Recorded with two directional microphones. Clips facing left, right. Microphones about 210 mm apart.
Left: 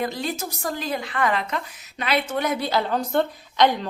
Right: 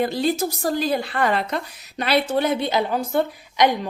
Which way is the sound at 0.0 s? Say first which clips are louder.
Right 6 dB; 30° right (ahead or behind).